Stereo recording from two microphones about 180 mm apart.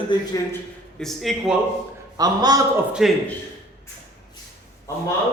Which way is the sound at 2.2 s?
20° right (ahead or behind).